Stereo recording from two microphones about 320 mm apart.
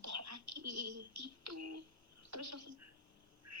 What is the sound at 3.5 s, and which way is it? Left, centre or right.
Duck, right.